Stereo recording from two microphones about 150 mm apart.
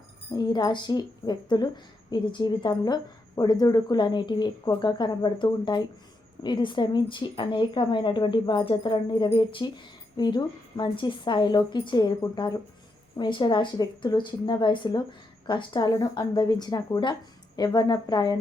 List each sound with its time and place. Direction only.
0.3 s a woman's voice: 30° left (ahead or behind)